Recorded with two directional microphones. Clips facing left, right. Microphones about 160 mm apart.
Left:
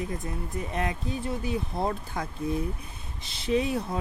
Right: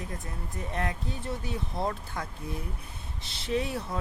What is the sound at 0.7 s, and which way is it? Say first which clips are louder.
Speech: left 2 dB; 15° left (ahead or behind).